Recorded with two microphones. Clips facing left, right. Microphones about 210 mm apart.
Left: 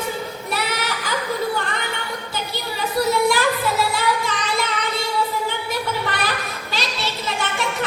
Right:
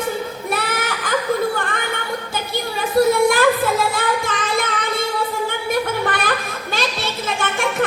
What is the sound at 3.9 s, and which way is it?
Music, 50° right (ahead or behind).